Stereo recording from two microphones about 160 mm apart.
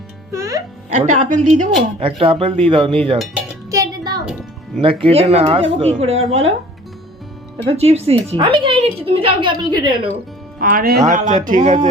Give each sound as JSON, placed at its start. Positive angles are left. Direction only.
{"t": 0.3, "sound": "music", "side_deg": -20}
{"t": 0.9, "sound": "speech", "side_deg": -50}
{"t": 2.0, "sound": "a woman's voice", "side_deg": -35}
{"t": 3.7, "sound": "a sound", "side_deg": -25}
{"t": 4.8, "sound": "a woman's voice", "side_deg": -35}
{"t": 7.7, "sound": "a woman's voice", "side_deg": -40}
{"t": 10.6, "sound": "speech", "side_deg": -60}